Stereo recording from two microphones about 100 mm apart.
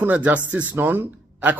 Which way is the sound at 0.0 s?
15° right (ahead or behind).